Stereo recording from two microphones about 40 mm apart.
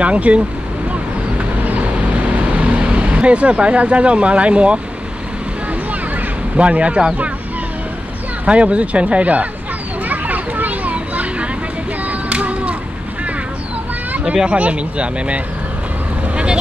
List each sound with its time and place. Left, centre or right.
0.0 s speech: right
1.4 s vehicle: right
6.5 s speech: right
8.5 s speech: right
10.0 s children playing: right
12.1 s a sound: right
14.2 s speech: right